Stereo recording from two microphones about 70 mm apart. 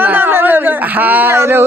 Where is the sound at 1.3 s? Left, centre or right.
Right.